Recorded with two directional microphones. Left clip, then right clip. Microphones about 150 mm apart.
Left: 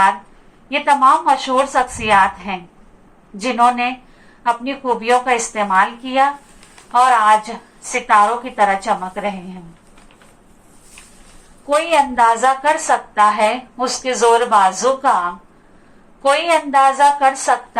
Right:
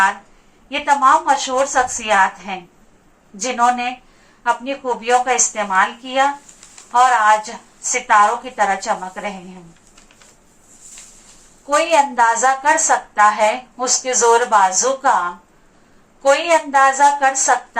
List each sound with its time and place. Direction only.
0.7 s a woman's voice: 25° left (ahead or behind)
11.7 s a woman's voice: 30° left (ahead or behind)